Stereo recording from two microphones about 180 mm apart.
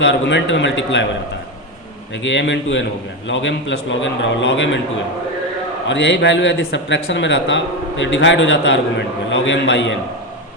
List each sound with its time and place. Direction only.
0.0 s a man's voice: 85° left
2.2 s speech: 90° left
5.9 s speech: 85° left